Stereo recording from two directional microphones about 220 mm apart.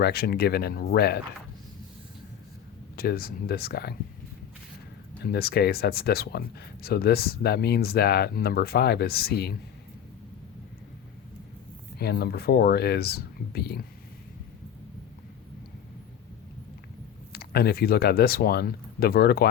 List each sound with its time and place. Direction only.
0.0 s speech: 45° left (ahead or behind)
2.9 s speech: 45° left (ahead or behind)
5.2 s speech: 45° left (ahead or behind)
11.9 s speech: 45° left (ahead or behind)
17.3 s speech: 45° left (ahead or behind)